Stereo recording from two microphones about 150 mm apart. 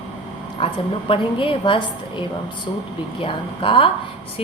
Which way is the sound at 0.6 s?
35° left (ahead or behind).